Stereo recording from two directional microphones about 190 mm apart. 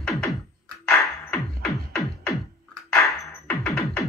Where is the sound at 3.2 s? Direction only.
10° left (ahead or behind).